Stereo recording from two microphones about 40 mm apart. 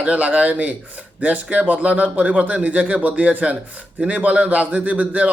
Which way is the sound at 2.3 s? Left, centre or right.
Right.